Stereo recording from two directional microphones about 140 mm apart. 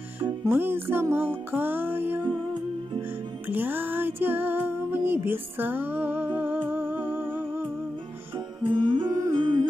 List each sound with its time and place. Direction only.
0.2 s music: 15° right (ahead or behind)
3.4 s music: 15° right (ahead or behind)
8.6 s humming: 35° right (ahead or behind)
9.1 s music: 25° right (ahead or behind)